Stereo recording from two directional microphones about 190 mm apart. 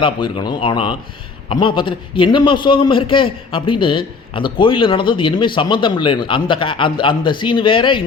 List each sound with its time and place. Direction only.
0.0 s a man's voice: 25° left (ahead or behind)